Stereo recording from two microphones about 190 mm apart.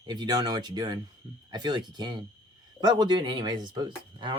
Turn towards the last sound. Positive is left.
turn(degrees=-25)  # may be behind; listen again after turning